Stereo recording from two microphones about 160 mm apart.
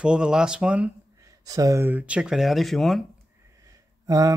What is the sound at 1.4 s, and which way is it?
Speech, 20° right (ahead or behind).